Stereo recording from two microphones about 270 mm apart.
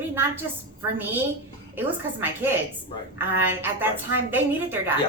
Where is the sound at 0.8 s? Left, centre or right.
Centre.